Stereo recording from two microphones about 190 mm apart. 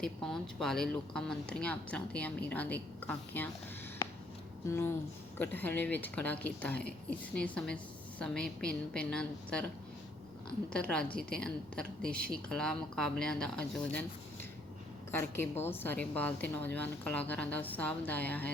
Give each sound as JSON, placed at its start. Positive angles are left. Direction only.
{"t": 0.0, "sound": "speech", "side_deg": 0}
{"t": 4.6, "sound": "a woman's voice", "side_deg": 15}
{"t": 10.7, "sound": "speech", "side_deg": 5}
{"t": 15.1, "sound": "a woman's voice", "side_deg": 10}